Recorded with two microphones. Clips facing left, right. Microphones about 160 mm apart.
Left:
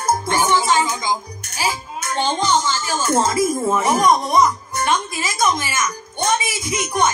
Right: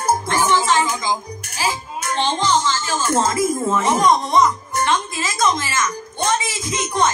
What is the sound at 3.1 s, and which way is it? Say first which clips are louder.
Speech: left 1 dB; 20° left (ahead or behind).